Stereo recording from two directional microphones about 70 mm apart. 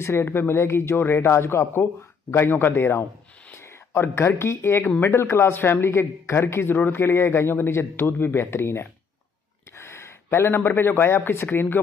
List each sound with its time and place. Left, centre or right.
0.0 s a man's voice: left